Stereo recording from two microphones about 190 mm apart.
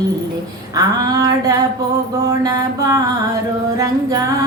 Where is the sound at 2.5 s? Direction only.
20° right (ahead or behind).